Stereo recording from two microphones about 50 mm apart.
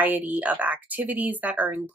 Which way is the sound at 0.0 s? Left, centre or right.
Right.